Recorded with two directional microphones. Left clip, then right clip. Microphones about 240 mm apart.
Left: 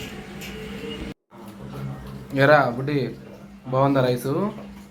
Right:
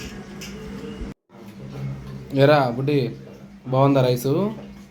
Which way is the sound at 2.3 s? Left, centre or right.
Centre.